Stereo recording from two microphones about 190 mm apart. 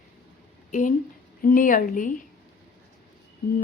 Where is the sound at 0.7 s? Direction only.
40° left (ahead or behind).